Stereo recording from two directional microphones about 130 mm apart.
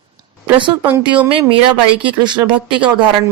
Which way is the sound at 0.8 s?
10° right (ahead or behind).